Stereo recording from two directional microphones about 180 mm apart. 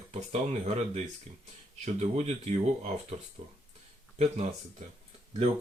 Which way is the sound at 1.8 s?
40° right (ahead or behind).